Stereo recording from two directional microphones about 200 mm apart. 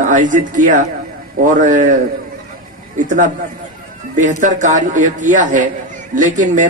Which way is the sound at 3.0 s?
40° right (ahead or behind).